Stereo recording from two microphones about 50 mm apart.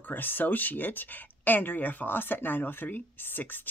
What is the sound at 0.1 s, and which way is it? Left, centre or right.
Speech, left.